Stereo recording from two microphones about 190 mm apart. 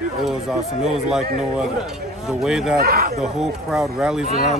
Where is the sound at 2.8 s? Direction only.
55° right (ahead or behind).